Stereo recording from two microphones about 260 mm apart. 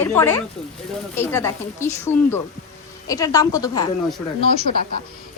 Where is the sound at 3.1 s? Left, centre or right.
Centre.